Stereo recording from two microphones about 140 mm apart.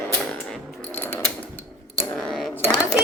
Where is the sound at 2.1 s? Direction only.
Centre (ahead or behind).